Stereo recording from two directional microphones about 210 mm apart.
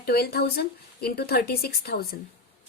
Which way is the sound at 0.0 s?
50° left (ahead or behind).